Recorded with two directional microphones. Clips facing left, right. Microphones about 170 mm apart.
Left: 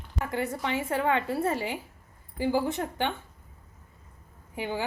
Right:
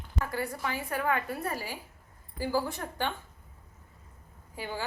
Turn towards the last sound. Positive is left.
turn(degrees=20)  # may be behind; listen again after turning